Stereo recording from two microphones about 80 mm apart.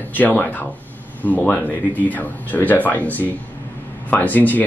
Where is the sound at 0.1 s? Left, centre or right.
Left.